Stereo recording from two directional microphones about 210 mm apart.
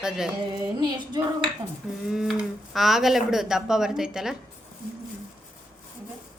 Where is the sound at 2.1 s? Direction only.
Centre (ahead or behind).